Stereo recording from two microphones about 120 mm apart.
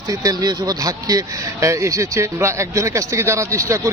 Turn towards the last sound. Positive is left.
turn(degrees=-25)  # may be behind; listen again after turning